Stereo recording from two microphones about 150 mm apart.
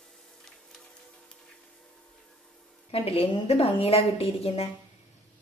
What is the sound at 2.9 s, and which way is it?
A woman's voice, 40° left (ahead or behind).